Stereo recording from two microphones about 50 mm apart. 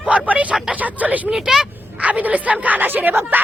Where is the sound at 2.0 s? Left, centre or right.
Right.